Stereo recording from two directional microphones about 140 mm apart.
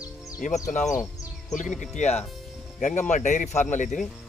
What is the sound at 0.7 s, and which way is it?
A man's voice, 60° left (ahead or behind).